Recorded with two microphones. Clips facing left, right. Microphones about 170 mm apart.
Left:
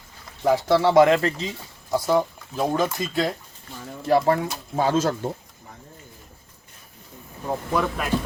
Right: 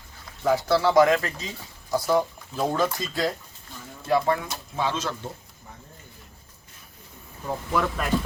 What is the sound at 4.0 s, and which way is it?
Speech, 35° left (ahead or behind).